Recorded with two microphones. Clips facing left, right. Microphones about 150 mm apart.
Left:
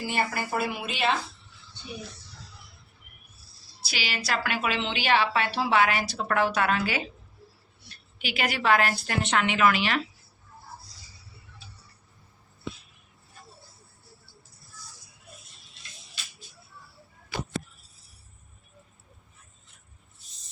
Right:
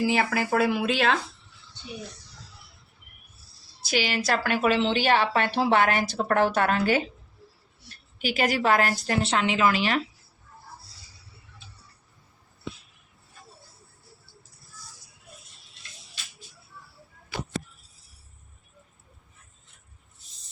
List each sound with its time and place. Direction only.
0.0 s speech: 90° right
3.8 s a woman's voice: 50° right (ahead or behind)
8.2 s a woman's voice: 40° right (ahead or behind)